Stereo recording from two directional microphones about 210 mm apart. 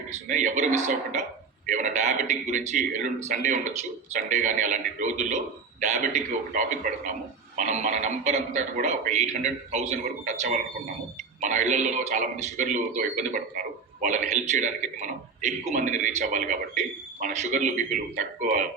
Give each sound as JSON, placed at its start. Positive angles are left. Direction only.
{"t": 0.1, "sound": "a man's voice", "side_deg": -35}